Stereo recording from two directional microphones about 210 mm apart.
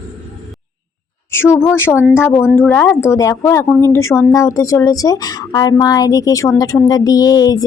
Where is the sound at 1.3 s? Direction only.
10° left (ahead or behind).